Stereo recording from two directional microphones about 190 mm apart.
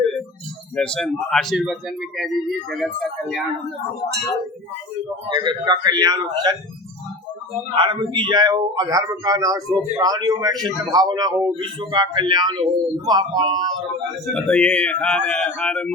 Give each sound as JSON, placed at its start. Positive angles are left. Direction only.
{"t": 0.8, "sound": "speech", "side_deg": 5}
{"t": 5.3, "sound": "speech", "side_deg": -25}
{"t": 7.8, "sound": "speech", "side_deg": -25}
{"t": 14.3, "sound": "speech", "side_deg": 5}